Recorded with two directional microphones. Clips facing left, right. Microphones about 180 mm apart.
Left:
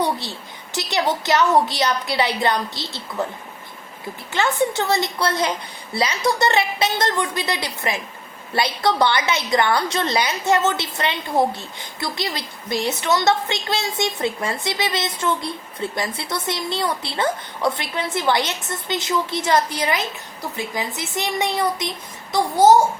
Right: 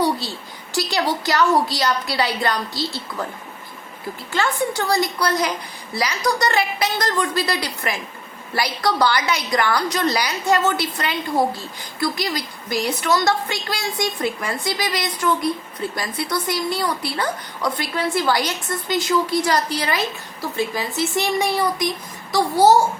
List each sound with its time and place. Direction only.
0.7 s a woman's voice: 20° left (ahead or behind)
4.3 s a woman's voice: 20° left (ahead or behind)